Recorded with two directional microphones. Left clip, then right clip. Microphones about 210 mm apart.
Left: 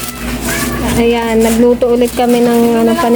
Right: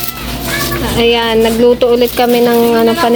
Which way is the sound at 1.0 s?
Centre (ahead or behind).